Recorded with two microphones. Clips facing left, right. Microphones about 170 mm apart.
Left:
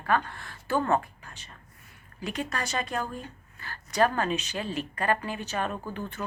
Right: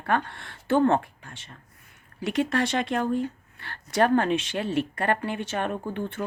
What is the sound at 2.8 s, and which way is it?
Speech, 70° right (ahead or behind).